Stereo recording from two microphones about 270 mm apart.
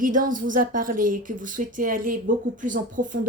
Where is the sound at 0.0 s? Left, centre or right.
Right.